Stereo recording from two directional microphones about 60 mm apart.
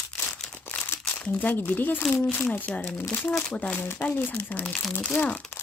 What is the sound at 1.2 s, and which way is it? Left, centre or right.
Speech, left.